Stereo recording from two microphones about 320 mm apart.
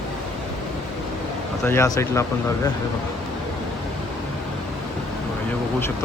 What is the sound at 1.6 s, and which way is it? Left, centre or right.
Speech, centre.